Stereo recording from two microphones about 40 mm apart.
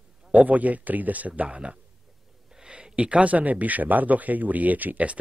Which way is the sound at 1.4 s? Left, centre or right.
Right.